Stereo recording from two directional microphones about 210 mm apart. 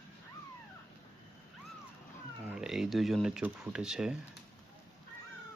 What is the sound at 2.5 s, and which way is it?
Speech, centre (ahead or behind).